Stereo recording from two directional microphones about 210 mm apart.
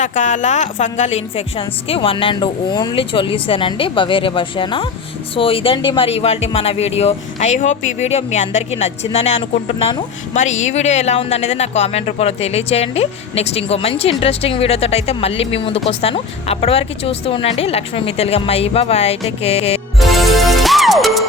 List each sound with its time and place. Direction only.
0.0 s speech: 35° left (ahead or behind)
20.0 s music: centre (ahead or behind)